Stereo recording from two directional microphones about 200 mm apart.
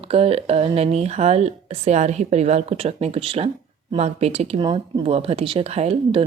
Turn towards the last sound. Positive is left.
turn(degrees=-30)  # may be behind; listen again after turning